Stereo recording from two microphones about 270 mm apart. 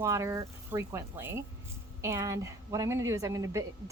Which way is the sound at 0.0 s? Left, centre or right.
Centre.